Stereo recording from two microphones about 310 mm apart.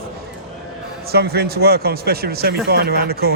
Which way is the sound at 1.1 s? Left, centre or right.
Right.